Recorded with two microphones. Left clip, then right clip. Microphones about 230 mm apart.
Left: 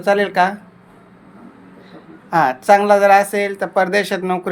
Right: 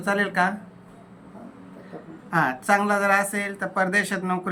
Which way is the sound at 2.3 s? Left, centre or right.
Centre.